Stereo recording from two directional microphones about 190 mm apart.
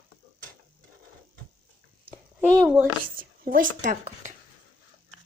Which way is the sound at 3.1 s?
45° right (ahead or behind).